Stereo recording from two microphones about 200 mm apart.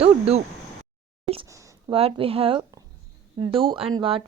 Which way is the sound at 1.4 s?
15° right (ahead or behind).